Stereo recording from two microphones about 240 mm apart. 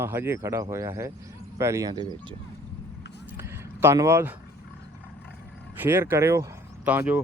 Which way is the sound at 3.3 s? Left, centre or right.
Centre.